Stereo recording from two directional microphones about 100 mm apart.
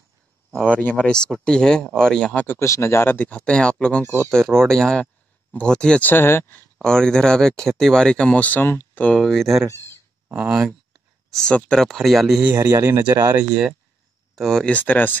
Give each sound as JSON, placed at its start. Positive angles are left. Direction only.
{"t": 0.7, "sound": "speech", "side_deg": 15}
{"t": 2.4, "sound": "speech", "side_deg": 25}
{"t": 4.0, "sound": "speech", "side_deg": -25}
{"t": 4.6, "sound": "speech", "side_deg": 5}
{"t": 6.8, "sound": "speech", "side_deg": 5}
{"t": 10.2, "sound": "speech", "side_deg": -15}
{"t": 11.3, "sound": "speech", "side_deg": 5}
{"t": 12.5, "sound": "speech", "side_deg": -30}
{"t": 14.3, "sound": "speech", "side_deg": 5}
{"t": 14.7, "sound": "speech", "side_deg": 15}